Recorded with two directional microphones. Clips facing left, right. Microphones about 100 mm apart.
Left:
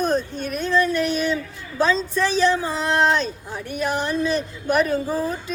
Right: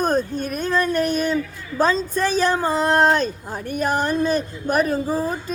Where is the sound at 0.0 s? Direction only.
45° right (ahead or behind).